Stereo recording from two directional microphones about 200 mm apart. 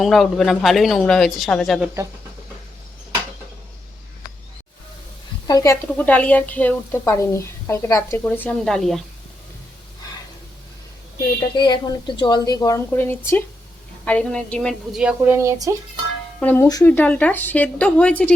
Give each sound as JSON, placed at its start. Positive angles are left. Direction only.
{"t": 0.0, "sound": "speech", "side_deg": 0}
{"t": 5.5, "sound": "a woman's voice", "side_deg": 20}
{"t": 6.0, "sound": "a woman's voice", "side_deg": 5}
{"t": 11.5, "sound": "a woman's voice", "side_deg": 25}
{"t": 16.4, "sound": "a woman's voice", "side_deg": 10}